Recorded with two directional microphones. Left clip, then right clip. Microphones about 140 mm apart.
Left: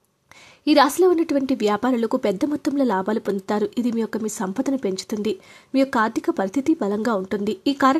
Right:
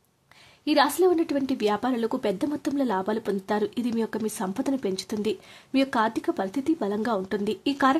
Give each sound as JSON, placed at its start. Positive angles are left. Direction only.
{"t": 0.7, "sound": "a woman's voice", "side_deg": 35}